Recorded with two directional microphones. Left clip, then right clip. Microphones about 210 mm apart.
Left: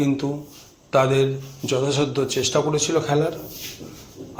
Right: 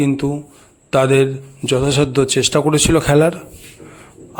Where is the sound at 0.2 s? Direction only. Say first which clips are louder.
Right 6 dB; 40° right (ahead or behind).